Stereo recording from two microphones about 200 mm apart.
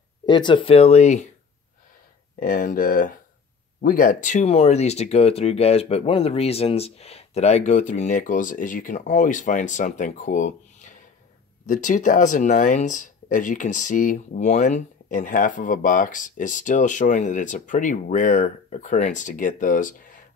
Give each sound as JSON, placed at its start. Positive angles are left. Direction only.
{"t": 0.3, "sound": "speech", "side_deg": 20}
{"t": 2.4, "sound": "speech", "side_deg": 45}